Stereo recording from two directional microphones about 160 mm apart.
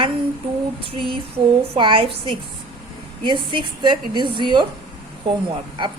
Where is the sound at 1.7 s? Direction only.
30° right (ahead or behind).